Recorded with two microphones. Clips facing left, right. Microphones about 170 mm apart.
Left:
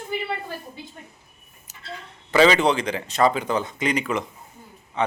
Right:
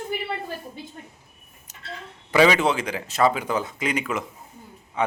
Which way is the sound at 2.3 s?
10° right (ahead or behind).